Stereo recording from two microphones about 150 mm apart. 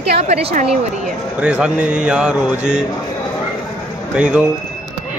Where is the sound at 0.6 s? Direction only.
5° right (ahead or behind).